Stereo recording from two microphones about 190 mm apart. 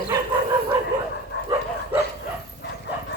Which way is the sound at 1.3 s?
60° left (ahead or behind).